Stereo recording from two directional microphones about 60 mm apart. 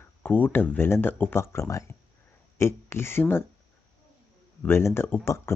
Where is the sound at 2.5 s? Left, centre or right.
Left.